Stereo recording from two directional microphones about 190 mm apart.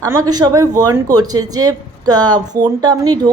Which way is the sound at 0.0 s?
15° right (ahead or behind).